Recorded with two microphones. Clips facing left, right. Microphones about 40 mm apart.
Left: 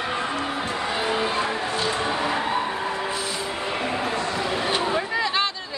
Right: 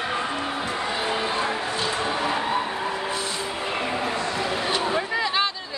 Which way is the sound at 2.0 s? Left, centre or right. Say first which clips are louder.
Left 1 dB; centre.